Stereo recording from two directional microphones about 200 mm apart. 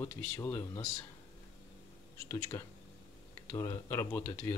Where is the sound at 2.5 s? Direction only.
15° left (ahead or behind).